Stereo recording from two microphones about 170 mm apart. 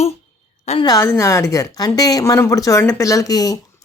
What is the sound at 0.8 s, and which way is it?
A woman's voice, 20° left (ahead or behind).